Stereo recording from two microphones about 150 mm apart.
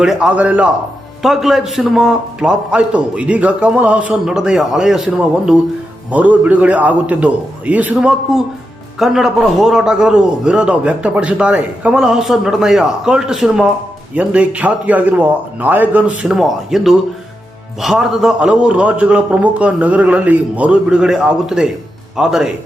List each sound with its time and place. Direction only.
0.0 s a man's voice: 5° right (ahead or behind)